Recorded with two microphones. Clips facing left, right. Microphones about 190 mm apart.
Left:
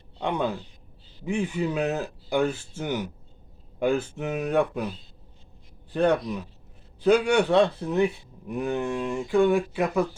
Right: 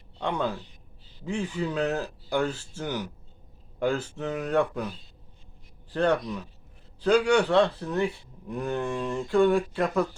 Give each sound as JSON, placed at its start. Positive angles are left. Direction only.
{"t": 0.2, "sound": "speech", "side_deg": 15}
{"t": 5.9, "sound": "speech", "side_deg": 15}
{"t": 7.0, "sound": "speech", "side_deg": 20}